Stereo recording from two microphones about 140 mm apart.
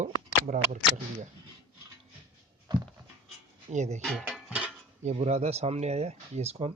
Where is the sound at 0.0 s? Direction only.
60° right (ahead or behind).